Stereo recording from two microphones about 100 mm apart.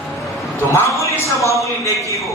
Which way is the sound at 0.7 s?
30° left (ahead or behind).